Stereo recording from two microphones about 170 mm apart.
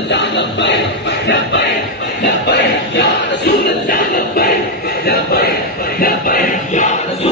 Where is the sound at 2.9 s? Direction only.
70° left (ahead or behind).